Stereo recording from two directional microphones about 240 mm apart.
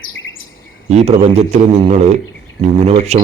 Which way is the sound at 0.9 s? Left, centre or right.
Right.